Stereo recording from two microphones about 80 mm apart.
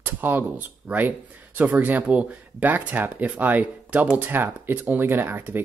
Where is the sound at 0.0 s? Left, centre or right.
Right.